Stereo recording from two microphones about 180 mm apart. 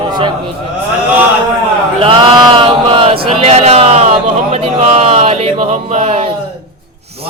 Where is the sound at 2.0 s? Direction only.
30° right (ahead or behind).